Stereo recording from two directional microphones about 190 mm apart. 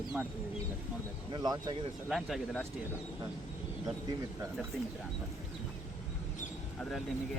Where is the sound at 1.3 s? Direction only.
20° right (ahead or behind).